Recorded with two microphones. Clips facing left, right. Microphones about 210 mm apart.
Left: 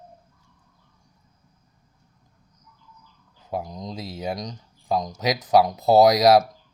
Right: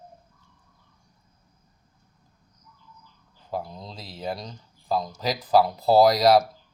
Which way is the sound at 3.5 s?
Centre (ahead or behind).